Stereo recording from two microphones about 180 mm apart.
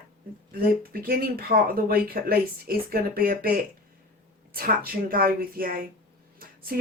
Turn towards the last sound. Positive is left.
turn(degrees=-55)  # may be behind; listen again after turning